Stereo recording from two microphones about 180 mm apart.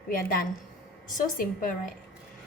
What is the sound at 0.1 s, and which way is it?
Speech, 55° left (ahead or behind).